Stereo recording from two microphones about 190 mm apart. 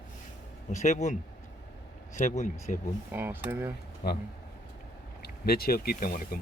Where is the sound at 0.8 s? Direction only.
40° left (ahead or behind).